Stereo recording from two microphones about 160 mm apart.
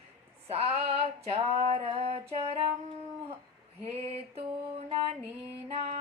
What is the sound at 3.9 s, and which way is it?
Female singing, 40° right (ahead or behind).